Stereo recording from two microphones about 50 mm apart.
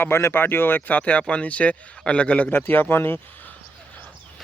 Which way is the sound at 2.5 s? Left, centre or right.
Left.